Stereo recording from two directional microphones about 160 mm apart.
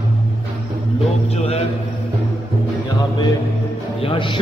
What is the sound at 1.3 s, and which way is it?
Speech, 40° left (ahead or behind).